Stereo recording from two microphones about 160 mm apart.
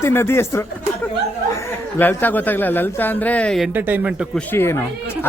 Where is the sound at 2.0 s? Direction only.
10° left (ahead or behind).